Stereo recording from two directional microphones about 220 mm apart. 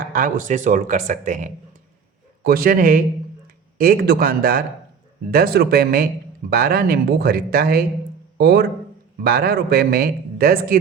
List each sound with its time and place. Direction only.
0.1 s speech: 40° right (ahead or behind)